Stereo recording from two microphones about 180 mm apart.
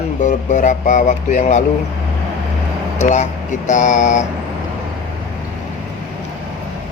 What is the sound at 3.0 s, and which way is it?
Speech, 40° left (ahead or behind).